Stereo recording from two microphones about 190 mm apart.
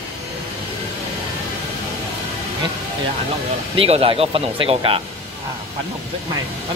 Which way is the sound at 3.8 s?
30° right (ahead or behind).